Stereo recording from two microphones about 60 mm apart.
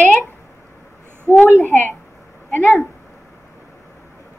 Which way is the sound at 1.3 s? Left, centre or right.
Left.